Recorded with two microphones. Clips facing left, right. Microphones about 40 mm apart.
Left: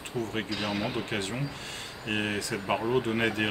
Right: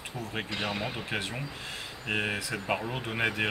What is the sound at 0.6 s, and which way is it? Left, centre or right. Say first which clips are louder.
Speech: left 1 dB; centre.